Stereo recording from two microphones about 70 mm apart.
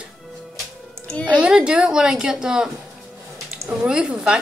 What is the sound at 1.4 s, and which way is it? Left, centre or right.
A woman's voice, centre.